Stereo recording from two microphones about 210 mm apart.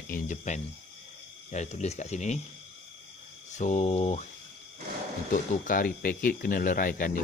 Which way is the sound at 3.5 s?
35° left (ahead or behind).